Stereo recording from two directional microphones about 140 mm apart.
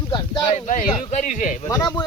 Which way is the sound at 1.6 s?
25° left (ahead or behind).